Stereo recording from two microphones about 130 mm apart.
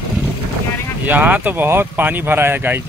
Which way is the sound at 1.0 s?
15° right (ahead or behind).